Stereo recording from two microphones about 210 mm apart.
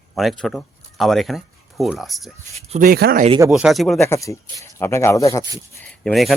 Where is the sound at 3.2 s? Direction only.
20° right (ahead or behind).